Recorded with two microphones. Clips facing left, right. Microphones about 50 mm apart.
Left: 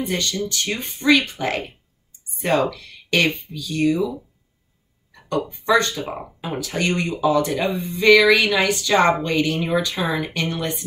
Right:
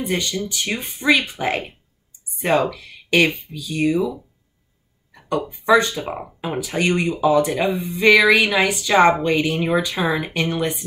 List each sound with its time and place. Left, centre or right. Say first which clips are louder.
0.0 s speech: right 1 dB; centre
5.5 s speech: right 3 dB; centre